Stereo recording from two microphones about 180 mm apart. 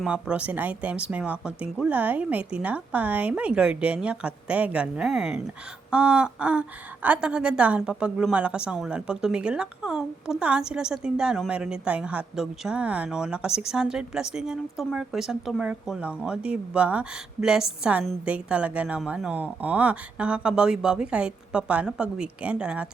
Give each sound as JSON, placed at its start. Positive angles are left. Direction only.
{"t": 0.0, "sound": "a woman's voice", "side_deg": -5}